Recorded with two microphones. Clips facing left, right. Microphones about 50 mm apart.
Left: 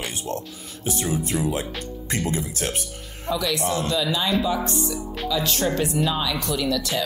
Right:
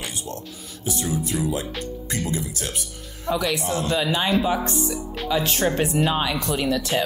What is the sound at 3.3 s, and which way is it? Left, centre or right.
Speech, right.